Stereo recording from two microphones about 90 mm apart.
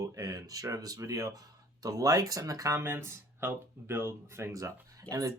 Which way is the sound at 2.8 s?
30° right (ahead or behind).